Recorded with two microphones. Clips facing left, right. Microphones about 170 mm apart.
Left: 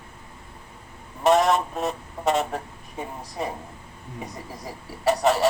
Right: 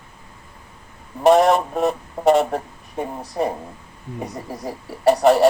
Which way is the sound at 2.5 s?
50° right (ahead or behind).